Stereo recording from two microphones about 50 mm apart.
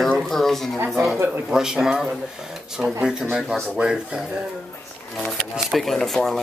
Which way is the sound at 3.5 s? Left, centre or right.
Centre.